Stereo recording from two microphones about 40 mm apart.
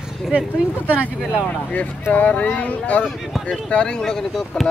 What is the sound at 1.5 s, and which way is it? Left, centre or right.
Speech, left.